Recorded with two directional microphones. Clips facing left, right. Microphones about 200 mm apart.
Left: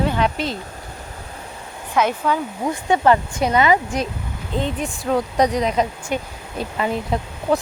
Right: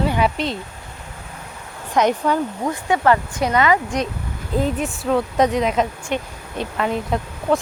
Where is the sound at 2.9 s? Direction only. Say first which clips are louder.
Left 1 dB; 25° left (ahead or behind).